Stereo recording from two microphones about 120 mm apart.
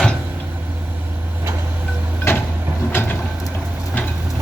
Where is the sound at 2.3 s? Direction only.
20° left (ahead or behind).